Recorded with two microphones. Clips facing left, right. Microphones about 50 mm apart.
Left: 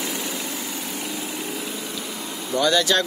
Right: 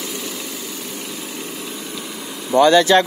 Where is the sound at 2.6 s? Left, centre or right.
Right.